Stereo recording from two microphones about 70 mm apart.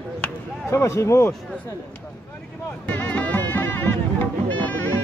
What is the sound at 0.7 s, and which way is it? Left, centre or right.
Speech, left.